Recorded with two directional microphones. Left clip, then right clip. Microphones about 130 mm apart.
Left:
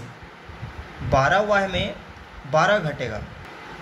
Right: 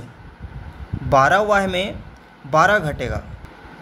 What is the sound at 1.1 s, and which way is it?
Speech, 90° right.